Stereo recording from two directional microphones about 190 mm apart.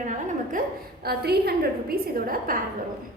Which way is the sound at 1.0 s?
55° right (ahead or behind).